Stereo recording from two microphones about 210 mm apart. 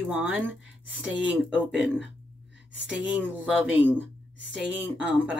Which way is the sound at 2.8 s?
5° right (ahead or behind).